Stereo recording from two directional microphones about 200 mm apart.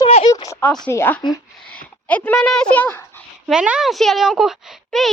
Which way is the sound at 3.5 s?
5° right (ahead or behind).